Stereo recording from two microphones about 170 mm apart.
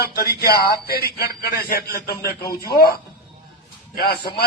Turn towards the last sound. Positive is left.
turn(degrees=70)  # may be behind; listen again after turning